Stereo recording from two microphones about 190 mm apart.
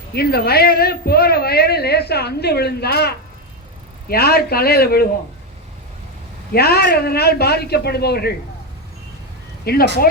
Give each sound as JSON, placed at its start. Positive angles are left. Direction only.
{"t": 0.1, "sound": "a woman's voice", "side_deg": 55}
{"t": 6.5, "sound": "a woman's voice", "side_deg": 55}
{"t": 9.7, "sound": "speech", "side_deg": 55}